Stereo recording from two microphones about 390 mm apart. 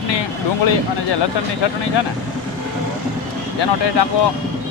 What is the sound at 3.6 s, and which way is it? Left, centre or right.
Speech, left.